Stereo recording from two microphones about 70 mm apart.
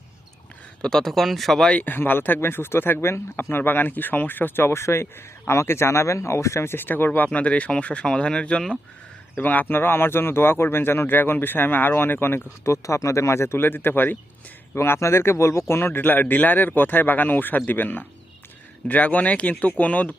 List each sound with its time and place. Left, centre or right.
0.8 s speech: centre
1.7 s speech: left
7.3 s speech: centre
9.3 s speech: left
14.8 s speech: left; by 20.1 s centre